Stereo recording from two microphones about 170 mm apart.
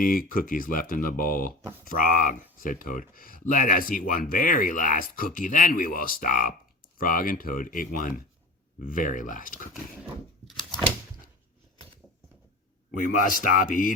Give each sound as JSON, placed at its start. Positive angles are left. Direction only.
{"t": 0.0, "sound": "speech", "side_deg": 55}
{"t": 12.9, "sound": "speech", "side_deg": 50}